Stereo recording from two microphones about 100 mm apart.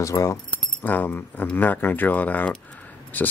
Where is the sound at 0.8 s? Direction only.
20° left (ahead or behind).